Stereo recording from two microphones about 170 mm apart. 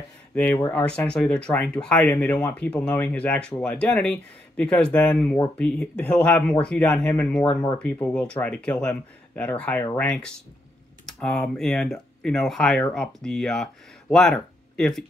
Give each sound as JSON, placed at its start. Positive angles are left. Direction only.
{"t": 0.3, "sound": "speech", "side_deg": 10}